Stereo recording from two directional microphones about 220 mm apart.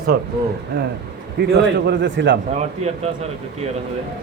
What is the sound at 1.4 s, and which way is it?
Speech, 55° right (ahead or behind).